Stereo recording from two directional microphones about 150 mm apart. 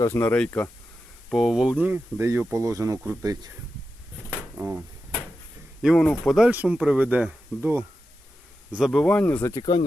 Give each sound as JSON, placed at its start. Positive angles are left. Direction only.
{"t": 0.0, "sound": "speech", "side_deg": 15}
{"t": 1.3, "sound": "speech", "side_deg": 0}
{"t": 4.5, "sound": "speech", "side_deg": -10}
{"t": 5.8, "sound": "speech", "side_deg": 0}
{"t": 8.7, "sound": "speech", "side_deg": 0}